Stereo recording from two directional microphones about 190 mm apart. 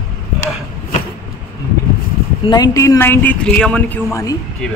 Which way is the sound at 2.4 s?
20° left (ahead or behind).